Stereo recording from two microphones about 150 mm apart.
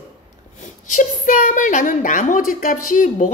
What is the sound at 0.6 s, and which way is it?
A woman's voice, 55° left (ahead or behind).